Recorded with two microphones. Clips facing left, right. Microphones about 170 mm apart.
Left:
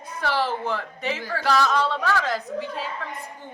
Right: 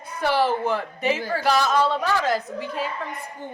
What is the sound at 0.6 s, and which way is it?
Speech, 10° right (ahead or behind).